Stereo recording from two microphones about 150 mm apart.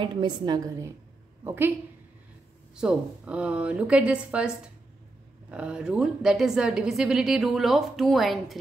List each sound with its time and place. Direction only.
0.0 s a woman's voice: 30° right (ahead or behind); by 1.7 s 15° right (ahead or behind)
2.7 s a woman's voice: 5° right (ahead or behind)
5.5 s a woman's voice: 5° right (ahead or behind)